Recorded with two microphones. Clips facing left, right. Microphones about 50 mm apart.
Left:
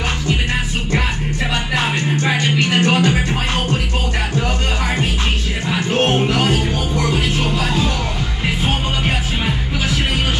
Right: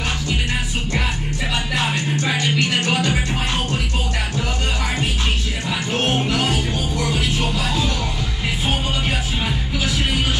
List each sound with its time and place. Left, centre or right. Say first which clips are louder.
1.8 s music: left 3 dB; left
5.7 s music: left 5 dB; left